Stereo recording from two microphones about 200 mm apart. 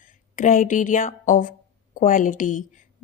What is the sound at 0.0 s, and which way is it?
Speech, 40° left (ahead or behind).